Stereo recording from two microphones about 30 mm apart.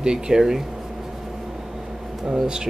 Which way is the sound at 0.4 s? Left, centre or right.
Centre.